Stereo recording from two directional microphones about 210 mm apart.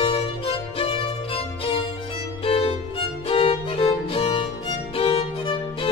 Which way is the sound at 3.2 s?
25° left (ahead or behind).